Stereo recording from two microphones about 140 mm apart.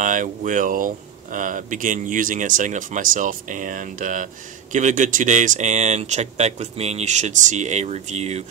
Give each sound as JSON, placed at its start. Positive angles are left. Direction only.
{"t": 0.0, "sound": "speech", "side_deg": -65}